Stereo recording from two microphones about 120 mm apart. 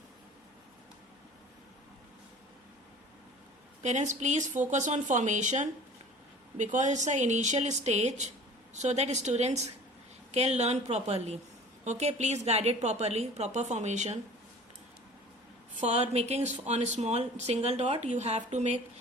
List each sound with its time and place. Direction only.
3.8 s a woman's voice: 85° right
15.8 s a woman's voice: 65° right (ahead or behind)